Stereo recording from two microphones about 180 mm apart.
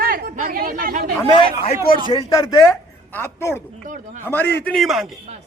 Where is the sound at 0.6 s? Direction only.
55° right (ahead or behind).